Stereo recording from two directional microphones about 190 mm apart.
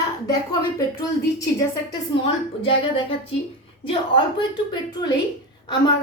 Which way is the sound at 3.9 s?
25° left (ahead or behind).